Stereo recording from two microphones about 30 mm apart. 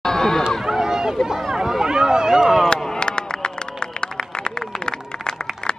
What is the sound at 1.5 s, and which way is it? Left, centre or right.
Run, centre.